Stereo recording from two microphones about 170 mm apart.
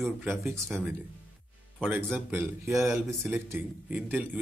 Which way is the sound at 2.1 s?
15° right (ahead or behind).